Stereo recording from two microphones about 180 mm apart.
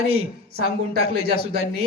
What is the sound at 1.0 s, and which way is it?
Speech, 35° right (ahead or behind).